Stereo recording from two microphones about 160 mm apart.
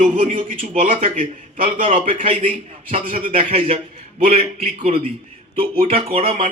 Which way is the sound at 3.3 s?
35° right (ahead or behind).